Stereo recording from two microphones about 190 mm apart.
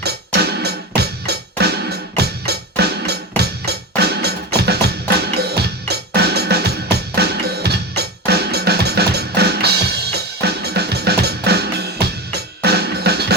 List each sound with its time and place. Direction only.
0.0 s music: 60° right (ahead or behind)